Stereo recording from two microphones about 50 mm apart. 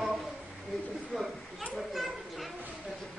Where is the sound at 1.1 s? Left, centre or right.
Centre.